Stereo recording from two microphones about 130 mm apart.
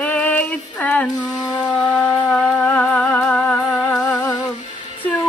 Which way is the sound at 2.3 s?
10° left (ahead or behind).